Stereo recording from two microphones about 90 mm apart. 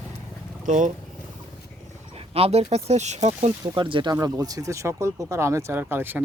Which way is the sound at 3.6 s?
60° right (ahead or behind).